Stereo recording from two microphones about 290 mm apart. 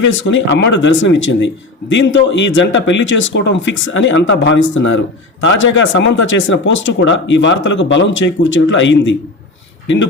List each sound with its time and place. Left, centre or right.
0.1 s speech: left